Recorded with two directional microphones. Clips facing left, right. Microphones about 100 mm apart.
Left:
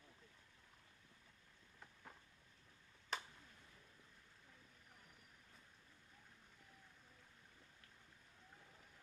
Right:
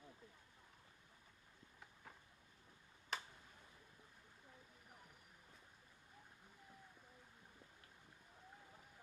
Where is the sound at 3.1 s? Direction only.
Centre (ahead or behind).